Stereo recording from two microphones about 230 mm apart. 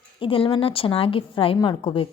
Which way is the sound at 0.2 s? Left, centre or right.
Left.